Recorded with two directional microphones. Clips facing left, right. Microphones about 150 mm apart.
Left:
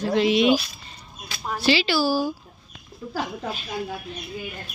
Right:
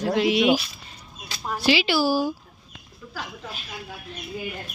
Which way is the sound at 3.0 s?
30° left (ahead or behind).